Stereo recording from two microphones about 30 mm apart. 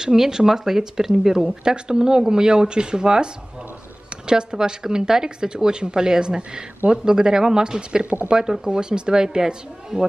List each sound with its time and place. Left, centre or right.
0.0 s speech: centre